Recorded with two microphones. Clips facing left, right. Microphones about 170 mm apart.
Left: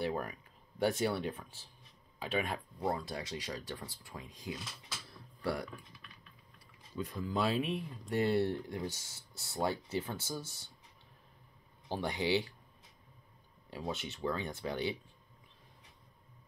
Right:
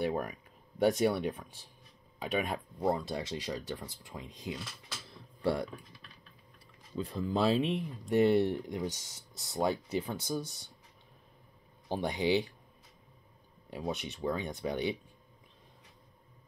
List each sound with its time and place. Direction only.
0.0 s speech: 15° right (ahead or behind)
5.1 s a sound: 25° right (ahead or behind)
7.0 s speech: 30° right (ahead or behind)
11.9 s speech: 15° right (ahead or behind)
13.7 s speech: 15° right (ahead or behind)